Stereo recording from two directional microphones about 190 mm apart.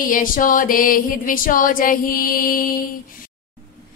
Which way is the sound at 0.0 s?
45° left (ahead or behind).